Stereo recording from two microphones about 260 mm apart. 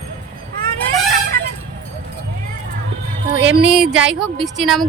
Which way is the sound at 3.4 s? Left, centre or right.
Right.